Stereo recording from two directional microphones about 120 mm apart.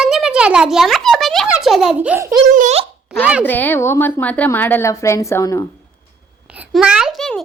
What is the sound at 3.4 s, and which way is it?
A woman's voice, 15° left (ahead or behind).